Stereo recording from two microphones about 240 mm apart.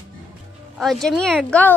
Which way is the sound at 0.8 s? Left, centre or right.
Centre.